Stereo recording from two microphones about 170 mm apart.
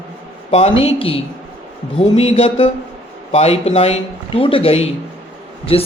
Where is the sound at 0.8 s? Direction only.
35° left (ahead or behind).